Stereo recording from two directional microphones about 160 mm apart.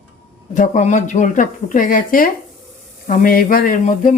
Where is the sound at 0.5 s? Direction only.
50° left (ahead or behind).